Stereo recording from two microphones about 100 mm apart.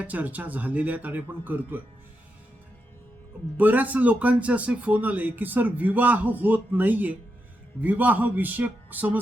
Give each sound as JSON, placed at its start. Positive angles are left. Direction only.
{"t": 0.0, "sound": "speech", "side_deg": -15}
{"t": 3.6, "sound": "speech", "side_deg": -15}